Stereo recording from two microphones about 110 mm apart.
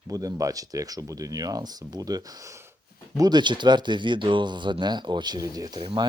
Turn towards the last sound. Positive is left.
turn(degrees=-35)  # may be behind; listen again after turning